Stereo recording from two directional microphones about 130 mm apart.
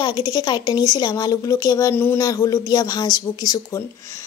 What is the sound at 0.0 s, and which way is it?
Speech, 30° left (ahead or behind).